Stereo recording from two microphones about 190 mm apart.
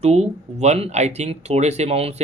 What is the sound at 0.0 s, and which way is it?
Speech, 35° right (ahead or behind).